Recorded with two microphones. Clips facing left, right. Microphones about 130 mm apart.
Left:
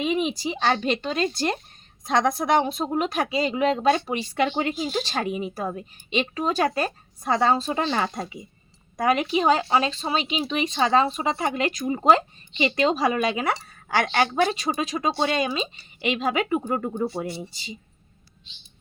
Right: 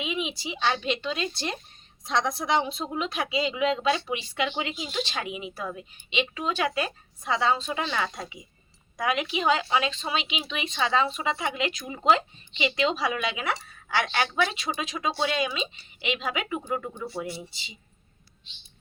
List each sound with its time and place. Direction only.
0.0 s speech: 45° left (ahead or behind)